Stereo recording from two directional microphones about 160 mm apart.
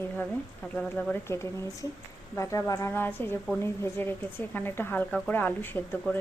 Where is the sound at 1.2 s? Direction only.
15° left (ahead or behind).